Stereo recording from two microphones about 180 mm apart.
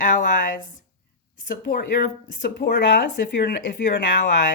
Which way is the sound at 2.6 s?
80° left.